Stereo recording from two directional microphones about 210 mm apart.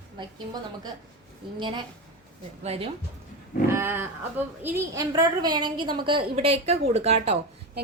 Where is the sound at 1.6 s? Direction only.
20° right (ahead or behind).